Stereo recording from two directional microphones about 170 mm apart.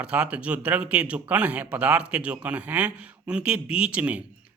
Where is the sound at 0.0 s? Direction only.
5° right (ahead or behind).